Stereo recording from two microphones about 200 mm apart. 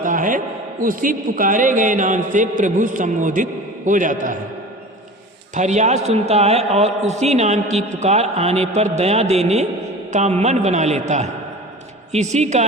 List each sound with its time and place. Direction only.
0.0 s a man's voice: 40° right (ahead or behind)
5.5 s a man's voice: 35° right (ahead or behind)